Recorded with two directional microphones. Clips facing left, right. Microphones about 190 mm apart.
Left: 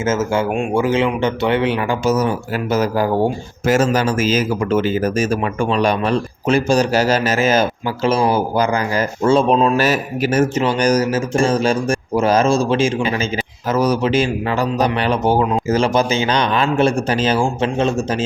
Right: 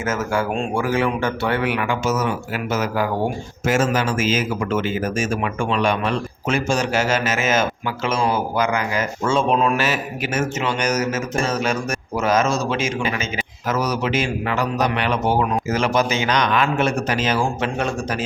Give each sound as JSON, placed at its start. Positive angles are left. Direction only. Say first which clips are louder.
{"t": 0.0, "sound": "a man's voice", "louder": "left 4 dB", "side_deg": 25}